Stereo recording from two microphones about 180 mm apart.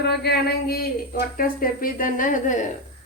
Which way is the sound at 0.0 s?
65° left (ahead or behind).